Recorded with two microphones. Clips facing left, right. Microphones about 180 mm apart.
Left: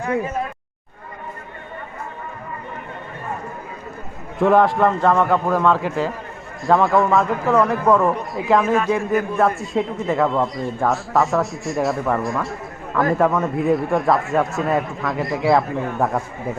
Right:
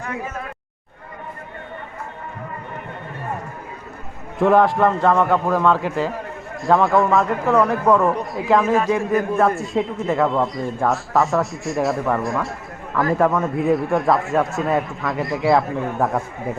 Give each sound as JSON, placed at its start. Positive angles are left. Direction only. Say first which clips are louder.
{"t": 4.4, "sound": "a man's voice", "louder": "even", "side_deg": 0}